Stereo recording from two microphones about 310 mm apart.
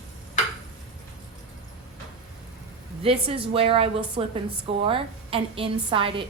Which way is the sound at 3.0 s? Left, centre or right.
Centre.